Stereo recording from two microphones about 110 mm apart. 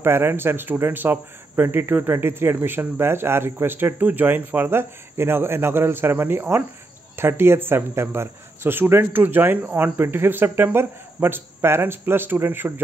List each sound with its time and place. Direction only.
0.0 s speech: 20° right (ahead or behind)